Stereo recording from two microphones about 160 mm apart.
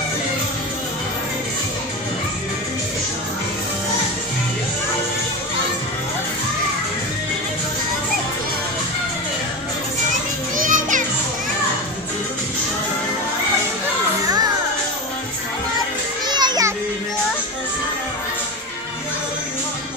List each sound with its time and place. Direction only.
10.5 s children playing: 55° right (ahead or behind)
16.3 s children playing: 25° right (ahead or behind)